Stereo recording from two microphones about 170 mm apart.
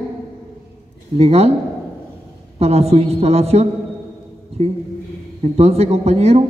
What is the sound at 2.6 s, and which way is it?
A man's voice, 40° right (ahead or behind).